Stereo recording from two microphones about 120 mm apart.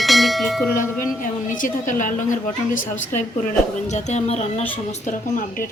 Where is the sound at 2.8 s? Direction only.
75° left (ahead or behind).